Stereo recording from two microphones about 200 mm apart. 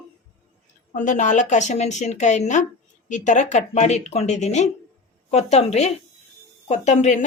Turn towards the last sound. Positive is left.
turn(degrees=35)  # may be behind; listen again after turning